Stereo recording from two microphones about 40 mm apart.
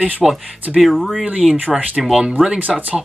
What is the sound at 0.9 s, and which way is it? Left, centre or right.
Speech, centre.